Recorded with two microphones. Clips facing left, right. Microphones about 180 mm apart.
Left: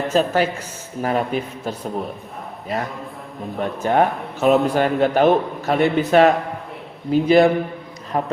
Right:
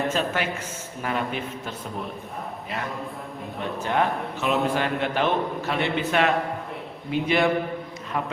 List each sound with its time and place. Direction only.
0.1 s a man's voice: 40° left (ahead or behind)